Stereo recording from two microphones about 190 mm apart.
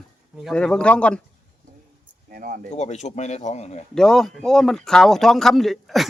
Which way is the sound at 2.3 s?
45° right (ahead or behind).